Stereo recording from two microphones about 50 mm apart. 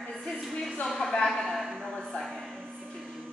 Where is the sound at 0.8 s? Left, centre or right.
Centre.